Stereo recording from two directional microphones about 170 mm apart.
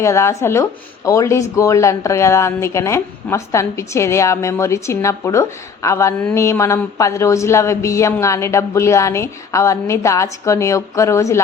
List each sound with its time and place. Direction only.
0.0 s a woman's voice: 15° left (ahead or behind)